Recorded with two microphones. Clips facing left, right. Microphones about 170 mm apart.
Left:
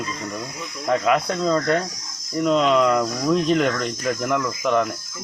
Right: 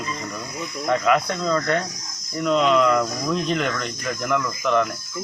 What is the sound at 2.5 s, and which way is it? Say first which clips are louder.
Speech: even; 5° left (ahead or behind).